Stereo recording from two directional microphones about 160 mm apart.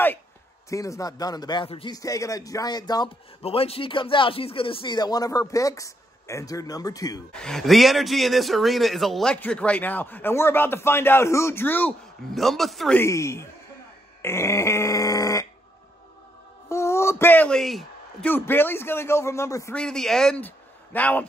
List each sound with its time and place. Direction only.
0.7 s speech: 20° left (ahead or behind)
2.0 s speech: 20° left (ahead or behind)
3.4 s speech: 35° left (ahead or behind)
7.3 s a man's voice: 5° left (ahead or behind)
13.0 s a man's voice: 20° left (ahead or behind)
16.6 s a sound: 15° left (ahead or behind); by 18.3 s centre (ahead or behind)
18.3 s a man's voice: 15° left (ahead or behind)
19.7 s a man's voice: 5° left (ahead or behind)